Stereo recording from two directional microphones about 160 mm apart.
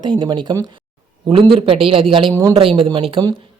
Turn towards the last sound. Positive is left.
turn(degrees=-35)  # may be behind; listen again after turning